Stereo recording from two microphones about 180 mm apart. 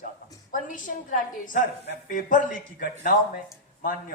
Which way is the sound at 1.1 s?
45° left (ahead or behind).